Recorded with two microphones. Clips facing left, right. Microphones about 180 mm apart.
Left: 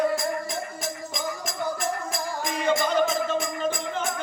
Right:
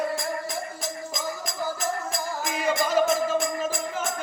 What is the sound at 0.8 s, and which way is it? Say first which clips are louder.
Music: left 1 dB; centre (ahead or behind).